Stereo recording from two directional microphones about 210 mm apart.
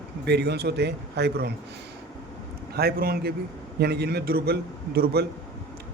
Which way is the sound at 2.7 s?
50° right (ahead or behind).